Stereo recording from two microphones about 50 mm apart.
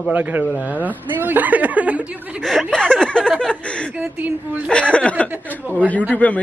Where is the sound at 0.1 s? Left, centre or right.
Right.